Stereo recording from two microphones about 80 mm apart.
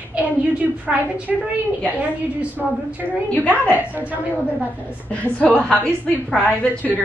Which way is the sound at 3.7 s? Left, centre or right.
Centre.